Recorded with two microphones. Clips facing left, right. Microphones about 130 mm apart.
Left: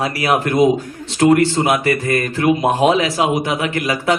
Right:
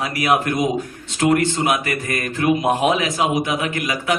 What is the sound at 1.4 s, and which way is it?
A man's voice, 35° left (ahead or behind).